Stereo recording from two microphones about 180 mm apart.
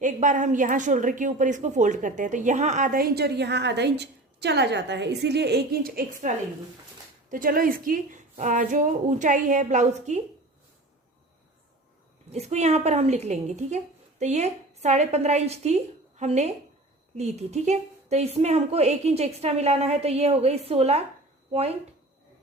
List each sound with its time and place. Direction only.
0.0 s a woman's voice: 45° right (ahead or behind)
12.3 s a woman's voice: 40° right (ahead or behind)